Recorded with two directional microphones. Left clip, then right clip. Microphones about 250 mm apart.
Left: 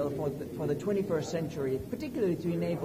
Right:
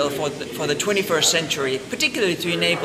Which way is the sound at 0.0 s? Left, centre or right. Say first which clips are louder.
Right 10 dB; right.